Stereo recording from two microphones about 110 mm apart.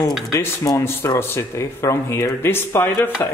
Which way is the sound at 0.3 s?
20° left (ahead or behind).